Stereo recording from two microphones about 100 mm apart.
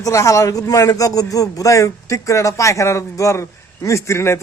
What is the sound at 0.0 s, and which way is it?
A man's voice, 35° left (ahead or behind).